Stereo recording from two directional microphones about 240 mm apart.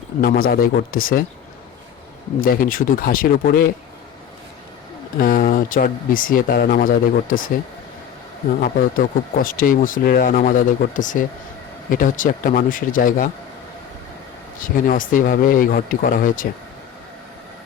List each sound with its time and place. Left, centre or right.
0.2 s speech: left
2.4 s speech: left
5.2 s speech: left
8.6 s speech: left
14.8 s speech: left